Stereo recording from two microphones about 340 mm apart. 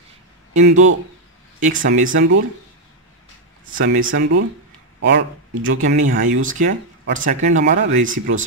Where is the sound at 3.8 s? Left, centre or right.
Right.